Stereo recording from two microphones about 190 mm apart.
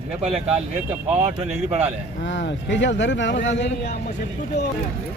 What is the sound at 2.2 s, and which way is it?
Speech, 70° left (ahead or behind).